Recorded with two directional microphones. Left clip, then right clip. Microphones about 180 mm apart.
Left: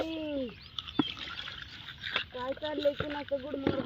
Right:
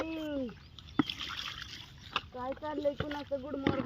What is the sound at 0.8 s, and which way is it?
Rowboat, 20° right (ahead or behind).